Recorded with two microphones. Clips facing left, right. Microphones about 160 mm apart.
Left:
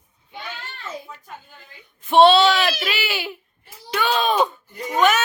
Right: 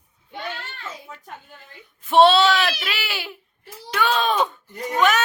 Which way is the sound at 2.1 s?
Centre (ahead or behind).